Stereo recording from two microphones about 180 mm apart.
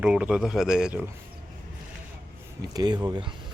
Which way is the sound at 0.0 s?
5° right (ahead or behind).